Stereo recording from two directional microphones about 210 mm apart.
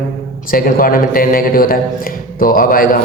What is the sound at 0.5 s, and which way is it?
A man's voice, 40° left (ahead or behind).